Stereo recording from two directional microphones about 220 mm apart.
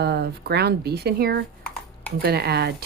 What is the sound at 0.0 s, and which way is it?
Speech, 50° right (ahead or behind).